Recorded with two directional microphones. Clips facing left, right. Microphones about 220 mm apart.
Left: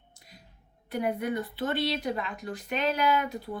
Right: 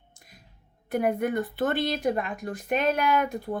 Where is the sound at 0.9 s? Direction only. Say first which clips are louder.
Right 4 dB; 50° right (ahead or behind).